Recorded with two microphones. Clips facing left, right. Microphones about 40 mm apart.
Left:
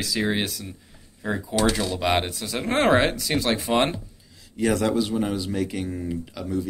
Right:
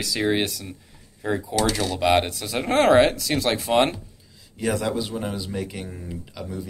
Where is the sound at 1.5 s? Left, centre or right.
Left.